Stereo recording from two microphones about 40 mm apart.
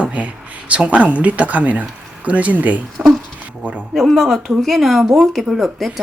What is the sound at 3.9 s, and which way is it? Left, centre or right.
Speech, centre.